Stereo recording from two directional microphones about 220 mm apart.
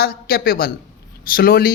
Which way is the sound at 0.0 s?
45° left (ahead or behind).